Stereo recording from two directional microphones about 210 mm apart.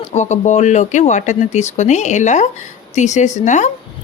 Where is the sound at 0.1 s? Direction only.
35° left (ahead or behind).